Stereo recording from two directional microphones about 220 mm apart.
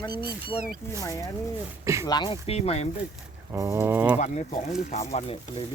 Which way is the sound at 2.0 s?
20° left (ahead or behind).